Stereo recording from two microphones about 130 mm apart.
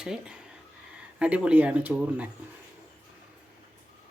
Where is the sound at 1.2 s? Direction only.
10° right (ahead or behind).